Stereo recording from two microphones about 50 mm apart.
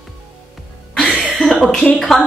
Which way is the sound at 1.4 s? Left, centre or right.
Left.